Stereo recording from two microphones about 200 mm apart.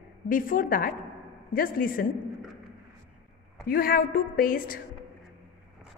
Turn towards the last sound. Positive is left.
turn(degrees=45)  # may be behind; listen again after turning